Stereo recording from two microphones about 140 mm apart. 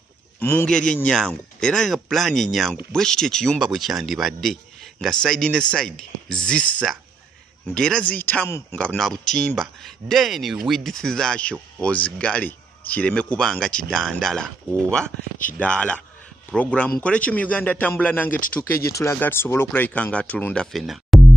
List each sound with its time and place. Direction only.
0.4 s a man's voice: 15° left (ahead or behind); by 21.2 s centre (ahead or behind)